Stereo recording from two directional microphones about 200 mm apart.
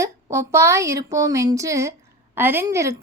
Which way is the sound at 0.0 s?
15° right (ahead or behind).